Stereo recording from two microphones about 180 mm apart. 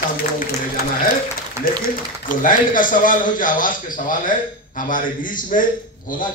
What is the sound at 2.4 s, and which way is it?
A man's voice, 50° left (ahead or behind).